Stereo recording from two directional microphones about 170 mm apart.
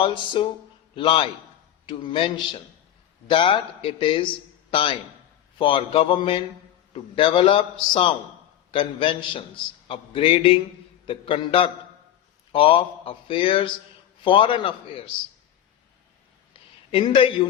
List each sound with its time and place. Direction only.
0.0 s a man's voice: 30° left (ahead or behind)
16.9 s speech: 30° left (ahead or behind)